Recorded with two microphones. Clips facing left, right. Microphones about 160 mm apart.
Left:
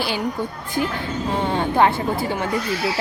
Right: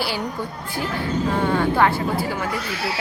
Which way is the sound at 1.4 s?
20° left (ahead or behind).